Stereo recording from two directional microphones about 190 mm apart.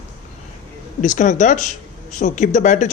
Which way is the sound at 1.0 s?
40° left (ahead or behind).